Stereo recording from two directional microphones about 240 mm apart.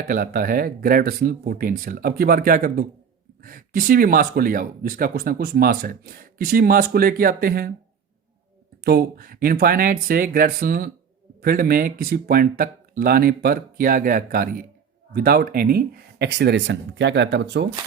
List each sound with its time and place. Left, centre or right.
0.1 s speech: right
8.8 s speech: right